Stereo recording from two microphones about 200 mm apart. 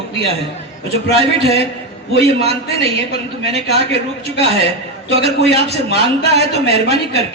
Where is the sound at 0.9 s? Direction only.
30° right (ahead or behind).